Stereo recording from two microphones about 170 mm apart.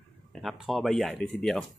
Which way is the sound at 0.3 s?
Centre (ahead or behind).